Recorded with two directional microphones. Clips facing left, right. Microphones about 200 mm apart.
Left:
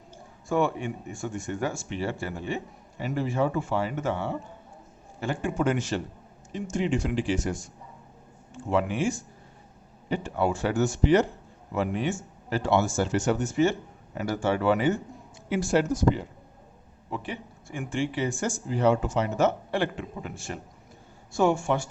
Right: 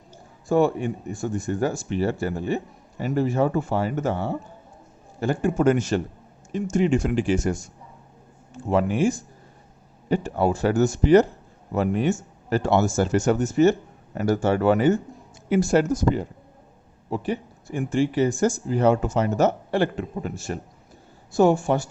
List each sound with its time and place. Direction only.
0.4 s speech: 35° right (ahead or behind)